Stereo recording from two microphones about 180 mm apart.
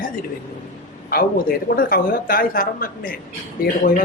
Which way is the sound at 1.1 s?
55° left (ahead or behind).